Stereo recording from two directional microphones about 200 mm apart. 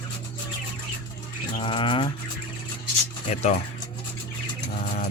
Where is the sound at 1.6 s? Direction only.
25° left (ahead or behind).